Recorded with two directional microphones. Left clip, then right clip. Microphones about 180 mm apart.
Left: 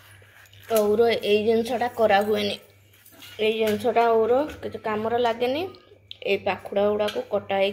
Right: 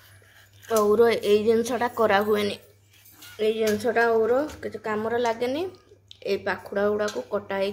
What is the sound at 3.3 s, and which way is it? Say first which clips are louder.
A woman's voice: left 1 dB; 5° right (ahead or behind).